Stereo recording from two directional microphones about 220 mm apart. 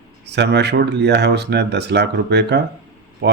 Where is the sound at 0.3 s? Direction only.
50° right (ahead or behind).